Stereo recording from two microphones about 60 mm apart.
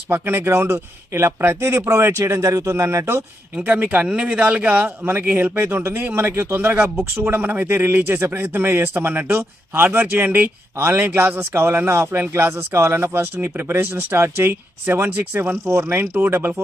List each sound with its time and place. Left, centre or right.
0.1 s speech: right
3.6 s a man's voice: right